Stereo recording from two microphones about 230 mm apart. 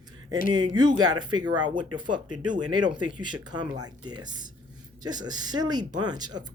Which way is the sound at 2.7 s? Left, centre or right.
Centre.